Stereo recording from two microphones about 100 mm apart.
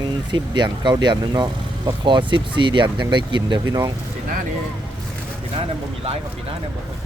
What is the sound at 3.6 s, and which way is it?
Speech, 35° right (ahead or behind).